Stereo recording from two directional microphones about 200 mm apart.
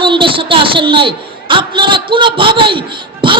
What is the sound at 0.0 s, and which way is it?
A man's voice, 25° right (ahead or behind).